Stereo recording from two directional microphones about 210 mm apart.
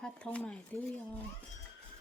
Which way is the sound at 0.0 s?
5° left (ahead or behind).